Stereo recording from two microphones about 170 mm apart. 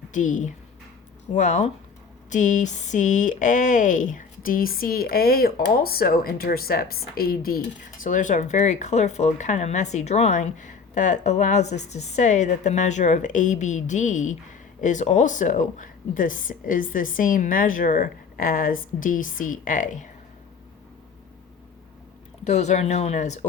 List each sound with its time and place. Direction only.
0.1 s speech: 45° left (ahead or behind)
8.0 s speech: 50° left (ahead or behind)
22.4 s speech: 40° left (ahead or behind)